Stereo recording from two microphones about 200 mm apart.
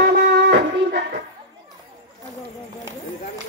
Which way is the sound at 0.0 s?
60° right (ahead or behind).